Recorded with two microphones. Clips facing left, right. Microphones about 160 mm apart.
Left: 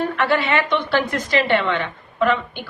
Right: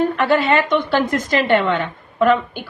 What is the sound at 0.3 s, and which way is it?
A woman's voice, 40° right (ahead or behind).